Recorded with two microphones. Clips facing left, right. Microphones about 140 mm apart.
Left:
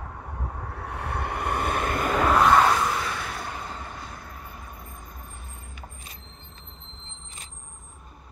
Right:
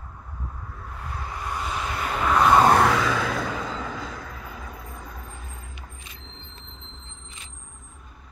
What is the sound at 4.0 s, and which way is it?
Vehicle, 90° right.